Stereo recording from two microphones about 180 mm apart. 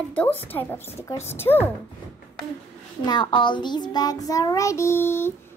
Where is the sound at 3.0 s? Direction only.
25° left (ahead or behind).